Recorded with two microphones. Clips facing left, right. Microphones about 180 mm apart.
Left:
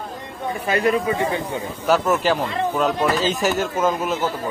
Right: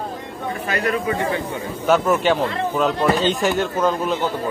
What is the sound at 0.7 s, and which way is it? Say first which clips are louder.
Speech: left 2 dB; 25° left (ahead or behind).